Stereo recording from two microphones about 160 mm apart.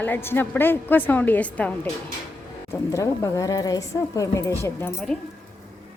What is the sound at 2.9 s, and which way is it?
A woman's voice, 20° left (ahead or behind).